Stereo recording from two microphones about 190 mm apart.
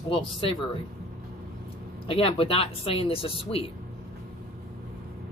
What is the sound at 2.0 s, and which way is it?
Speech, 30° left (ahead or behind).